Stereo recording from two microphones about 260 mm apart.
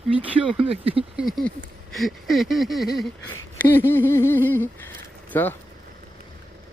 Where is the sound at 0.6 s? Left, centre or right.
Right.